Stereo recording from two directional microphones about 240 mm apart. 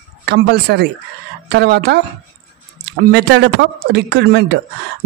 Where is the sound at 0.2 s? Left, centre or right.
Right.